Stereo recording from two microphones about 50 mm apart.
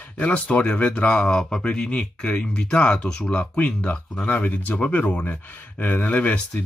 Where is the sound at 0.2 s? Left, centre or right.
Left.